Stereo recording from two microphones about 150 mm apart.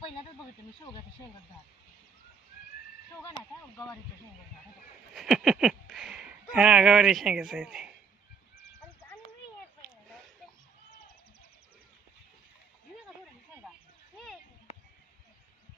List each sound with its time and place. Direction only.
5.1 s speech: 5° right (ahead or behind)